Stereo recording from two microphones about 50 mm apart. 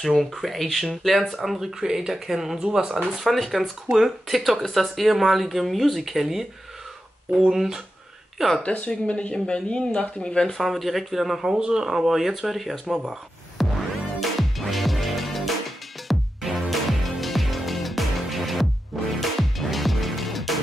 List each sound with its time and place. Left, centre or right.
0.0 s speech: centre
7.4 s speech: centre
8.6 s a woman's voice: left
10.6 s speech: centre
12.9 s a sound: centre
14.2 s music: centre